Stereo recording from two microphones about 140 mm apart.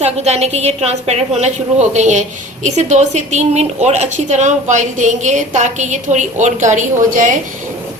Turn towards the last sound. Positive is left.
turn(degrees=-65)  # may be behind; listen again after turning